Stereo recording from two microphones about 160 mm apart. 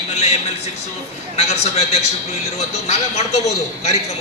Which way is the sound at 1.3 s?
45° left (ahead or behind).